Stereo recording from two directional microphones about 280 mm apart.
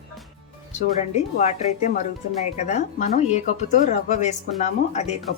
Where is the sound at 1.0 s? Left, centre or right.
Left.